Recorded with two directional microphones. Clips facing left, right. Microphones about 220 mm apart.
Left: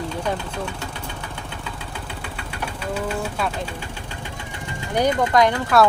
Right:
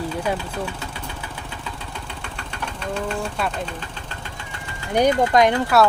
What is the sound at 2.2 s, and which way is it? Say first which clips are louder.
Engine: left 2 dB; 5° left (ahead or behind).